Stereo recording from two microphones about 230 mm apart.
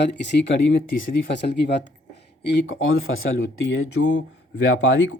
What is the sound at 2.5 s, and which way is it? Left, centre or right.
Speech, left.